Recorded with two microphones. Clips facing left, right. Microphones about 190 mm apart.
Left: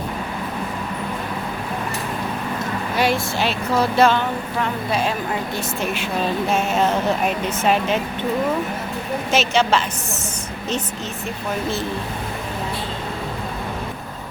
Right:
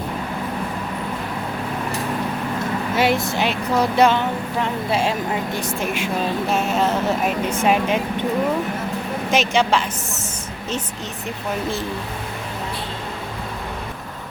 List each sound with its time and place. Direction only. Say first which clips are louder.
2.9 s speech: right 1 dB; 20° right (ahead or behind)
5.5 s speech: right 1 dB; 10° right (ahead or behind)
6.5 s speech: even; centre (ahead or behind)
7.5 s speech: right 1 dB; 10° right (ahead or behind)
9.3 s speech: even; 15° right (ahead or behind)